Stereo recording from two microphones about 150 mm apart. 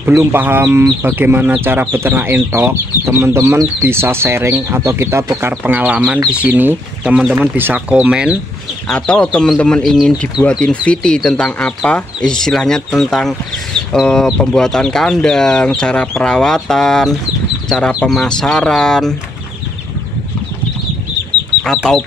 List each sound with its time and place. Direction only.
0.0 s speech: 15° right (ahead or behind)
8.8 s speech: 5° left (ahead or behind)